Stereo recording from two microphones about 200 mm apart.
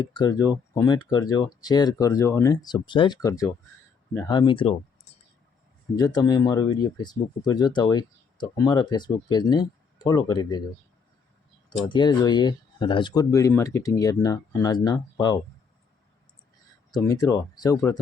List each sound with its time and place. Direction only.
0.0 s speech: 20° left (ahead or behind)
6.0 s speech: 20° left (ahead or behind)
11.9 s speech: 20° left (ahead or behind)
16.9 s speech: 15° left (ahead or behind)